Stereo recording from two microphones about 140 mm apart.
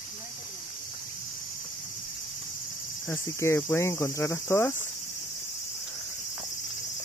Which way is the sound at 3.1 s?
20° left (ahead or behind).